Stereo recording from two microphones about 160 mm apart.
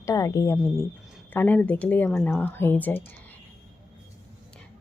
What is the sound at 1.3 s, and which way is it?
A woman's voice, 10° left (ahead or behind).